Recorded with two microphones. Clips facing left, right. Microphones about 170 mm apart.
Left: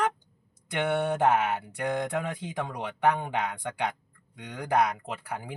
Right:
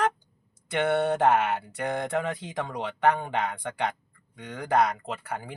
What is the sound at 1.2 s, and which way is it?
Speech, 10° left (ahead or behind).